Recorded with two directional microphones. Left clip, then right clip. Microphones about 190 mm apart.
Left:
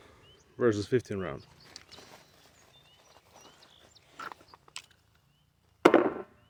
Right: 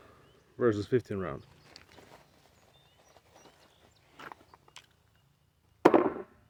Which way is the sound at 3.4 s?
15° left (ahead or behind).